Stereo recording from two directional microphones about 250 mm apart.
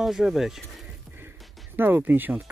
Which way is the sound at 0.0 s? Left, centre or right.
Centre.